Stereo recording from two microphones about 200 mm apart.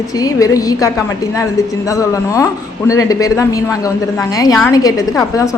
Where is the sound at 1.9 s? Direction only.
15° left (ahead or behind).